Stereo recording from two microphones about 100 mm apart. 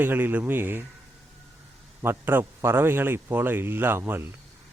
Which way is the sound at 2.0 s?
20° right (ahead or behind).